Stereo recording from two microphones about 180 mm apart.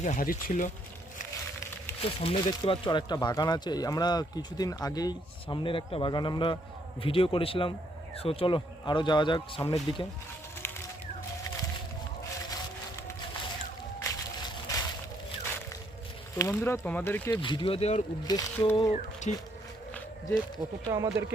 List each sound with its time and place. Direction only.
0.0 s speech: 45° left (ahead or behind)
2.0 s a man's voice: 30° left (ahead or behind)
14.0 s a sound: 20° left (ahead or behind)
16.3 s speech: 15° left (ahead or behind)
17.3 s speech: 25° left (ahead or behind)
18.3 s speech: 20° left (ahead or behind)
19.3 s a man's voice: 40° left (ahead or behind)
20.8 s speech: 15° right (ahead or behind)